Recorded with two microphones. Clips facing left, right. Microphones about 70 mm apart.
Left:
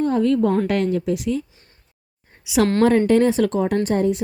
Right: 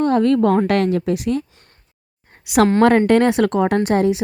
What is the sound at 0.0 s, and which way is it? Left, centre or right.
A woman's voice, right.